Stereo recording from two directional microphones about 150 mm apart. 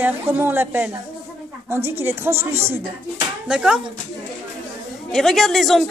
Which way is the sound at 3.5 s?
5° right (ahead or behind).